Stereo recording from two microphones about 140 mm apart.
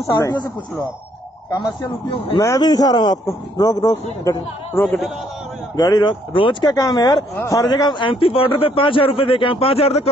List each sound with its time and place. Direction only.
0.0 s speech: 25° left (ahead or behind)
1.6 s speech: 30° left (ahead or behind)
4.8 s a man's voice: centre (ahead or behind)
5.8 s speech: 25° left (ahead or behind); by 10.0 s 45° left (ahead or behind)